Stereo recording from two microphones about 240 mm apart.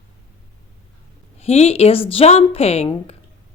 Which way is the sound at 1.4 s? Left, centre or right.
Left.